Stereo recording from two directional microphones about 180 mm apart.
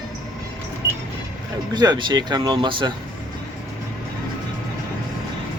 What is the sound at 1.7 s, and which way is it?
Speech, 25° right (ahead or behind).